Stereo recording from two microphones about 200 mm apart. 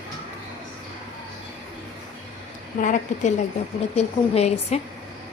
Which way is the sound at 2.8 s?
40° left (ahead or behind).